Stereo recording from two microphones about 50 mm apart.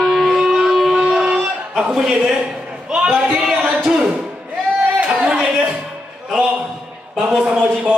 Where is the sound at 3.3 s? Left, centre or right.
Centre.